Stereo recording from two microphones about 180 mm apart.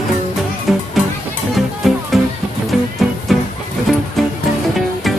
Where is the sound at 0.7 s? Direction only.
Centre (ahead or behind).